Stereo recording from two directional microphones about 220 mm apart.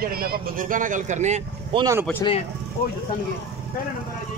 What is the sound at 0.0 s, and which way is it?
Speech, 40° right (ahead or behind).